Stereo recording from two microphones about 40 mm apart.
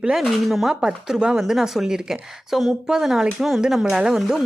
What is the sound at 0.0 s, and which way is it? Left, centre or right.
Speech, centre.